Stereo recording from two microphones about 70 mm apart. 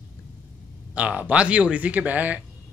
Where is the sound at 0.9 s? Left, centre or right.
Centre.